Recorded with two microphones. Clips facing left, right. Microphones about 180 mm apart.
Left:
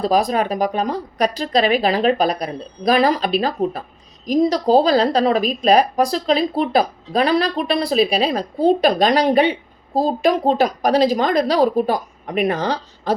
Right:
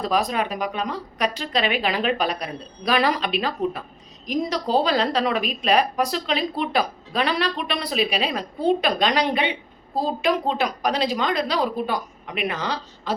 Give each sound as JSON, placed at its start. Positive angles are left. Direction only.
{"t": 0.0, "sound": "a woman's voice", "side_deg": 35}